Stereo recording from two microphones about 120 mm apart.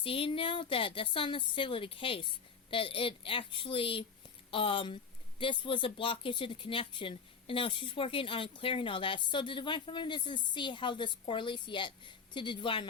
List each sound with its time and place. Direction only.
0.0 s speech: 50° left (ahead or behind)